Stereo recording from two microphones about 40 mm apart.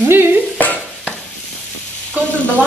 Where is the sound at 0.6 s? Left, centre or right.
Left.